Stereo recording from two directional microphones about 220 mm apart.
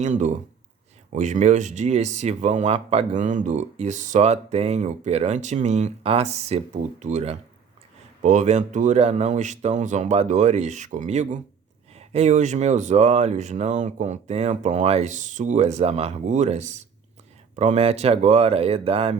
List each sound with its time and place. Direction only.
0.0 s speech: 35° right (ahead or behind)